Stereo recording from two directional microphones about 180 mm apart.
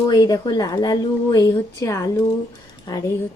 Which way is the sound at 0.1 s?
20° left (ahead or behind).